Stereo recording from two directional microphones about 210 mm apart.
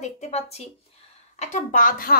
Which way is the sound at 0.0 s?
30° left (ahead or behind).